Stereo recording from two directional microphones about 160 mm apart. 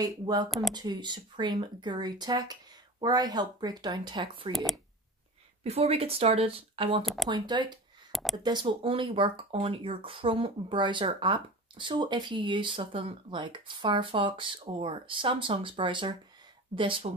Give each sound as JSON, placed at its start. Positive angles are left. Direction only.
{"t": 0.0, "sound": "speech", "side_deg": -25}
{"t": 0.5, "sound": "speech", "side_deg": 0}
{"t": 0.7, "sound": "speech", "side_deg": -25}
{"t": 4.5, "sound": "speech", "side_deg": 0}
{"t": 5.6, "sound": "speech", "side_deg": -40}
{"t": 8.1, "sound": "a sound", "side_deg": 0}
{"t": 8.4, "sound": "speech", "side_deg": -25}